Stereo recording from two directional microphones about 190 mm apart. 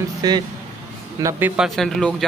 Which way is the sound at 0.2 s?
20° right (ahead or behind).